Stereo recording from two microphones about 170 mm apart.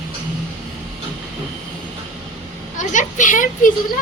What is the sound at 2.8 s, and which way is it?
Speech, 45° left (ahead or behind).